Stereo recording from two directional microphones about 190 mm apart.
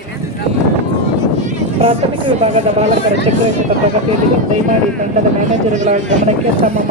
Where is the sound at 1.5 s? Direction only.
30° right (ahead or behind).